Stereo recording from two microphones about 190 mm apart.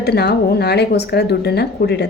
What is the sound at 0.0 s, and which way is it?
A woman's voice, 60° left (ahead or behind).